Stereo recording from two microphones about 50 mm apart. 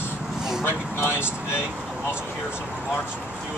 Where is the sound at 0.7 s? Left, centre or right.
Left.